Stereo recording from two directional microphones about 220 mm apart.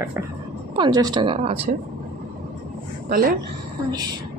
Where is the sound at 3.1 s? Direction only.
40° right (ahead or behind).